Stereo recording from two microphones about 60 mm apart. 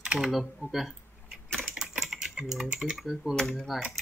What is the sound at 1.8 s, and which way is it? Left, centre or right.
Typing, centre.